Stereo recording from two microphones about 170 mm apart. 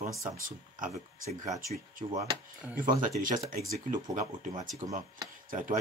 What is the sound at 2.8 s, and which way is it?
Speech, 55° right (ahead or behind).